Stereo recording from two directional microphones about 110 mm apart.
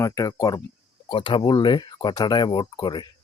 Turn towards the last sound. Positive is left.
turn(degrees=45)  # may be behind; listen again after turning